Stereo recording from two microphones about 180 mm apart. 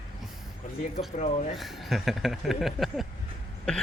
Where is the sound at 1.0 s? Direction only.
40° left (ahead or behind).